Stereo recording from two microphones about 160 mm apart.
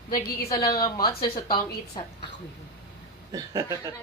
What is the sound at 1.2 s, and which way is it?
Speech, 70° left (ahead or behind).